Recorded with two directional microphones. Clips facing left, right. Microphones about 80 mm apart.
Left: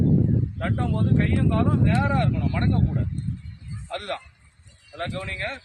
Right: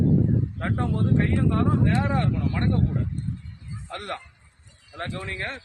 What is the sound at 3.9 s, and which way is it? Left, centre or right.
Speech, right.